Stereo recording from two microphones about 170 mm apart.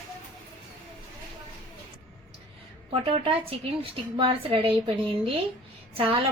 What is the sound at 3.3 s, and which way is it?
A woman's voice, 35° right (ahead or behind).